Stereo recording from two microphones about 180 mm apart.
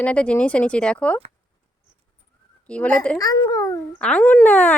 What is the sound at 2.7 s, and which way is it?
Speech, 5° left (ahead or behind).